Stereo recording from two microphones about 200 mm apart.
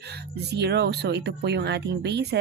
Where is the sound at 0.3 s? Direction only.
55° right (ahead or behind).